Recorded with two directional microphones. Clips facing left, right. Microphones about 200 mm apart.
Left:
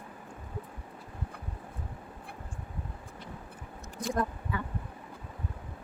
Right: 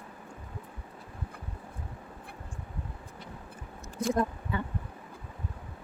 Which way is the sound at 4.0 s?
25° right (ahead or behind).